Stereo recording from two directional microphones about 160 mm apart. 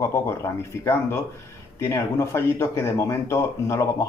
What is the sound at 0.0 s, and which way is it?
Speech, 15° left (ahead or behind).